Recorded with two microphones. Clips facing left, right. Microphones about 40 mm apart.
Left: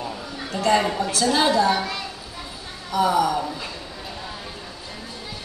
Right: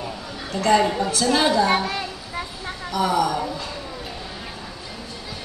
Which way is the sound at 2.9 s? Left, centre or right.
Centre.